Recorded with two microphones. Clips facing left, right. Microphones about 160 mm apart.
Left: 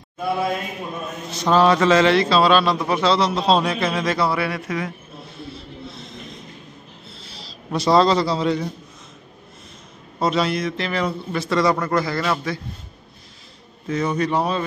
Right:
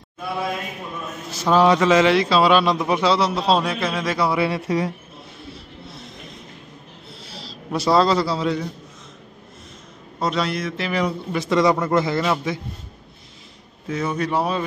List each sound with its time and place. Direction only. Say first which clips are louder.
1.3 s a man's voice: even; 10° right (ahead or behind)
4.3 s speech: right 3 dB; 25° right (ahead or behind)
7.3 s a man's voice: even; 5° right (ahead or behind)
10.2 s a man's voice: left 3 dB; centre (ahead or behind)
10.9 s a man's voice: right 1 dB; 15° right (ahead or behind)
13.8 s a man's voice: left 2 dB; 5° right (ahead or behind)